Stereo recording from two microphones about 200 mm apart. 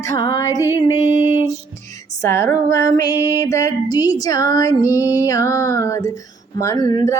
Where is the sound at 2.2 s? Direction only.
15° left (ahead or behind).